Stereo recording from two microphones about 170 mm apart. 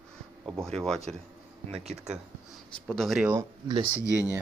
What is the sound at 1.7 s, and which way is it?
Speech, 40° right (ahead or behind).